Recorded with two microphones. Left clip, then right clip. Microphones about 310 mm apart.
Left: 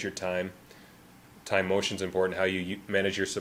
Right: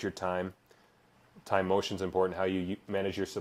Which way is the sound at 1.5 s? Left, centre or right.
Right.